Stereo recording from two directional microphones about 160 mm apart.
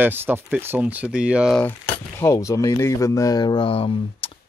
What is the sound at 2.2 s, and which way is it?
Speech, 20° left (ahead or behind).